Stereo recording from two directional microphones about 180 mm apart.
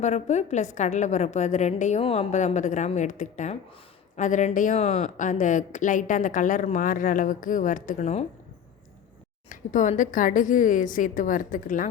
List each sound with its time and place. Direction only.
0.0 s a woman's voice: 40° left (ahead or behind)
9.5 s a woman's voice: 45° left (ahead or behind)